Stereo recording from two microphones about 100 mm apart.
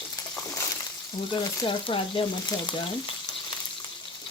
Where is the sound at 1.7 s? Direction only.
65° left (ahead or behind).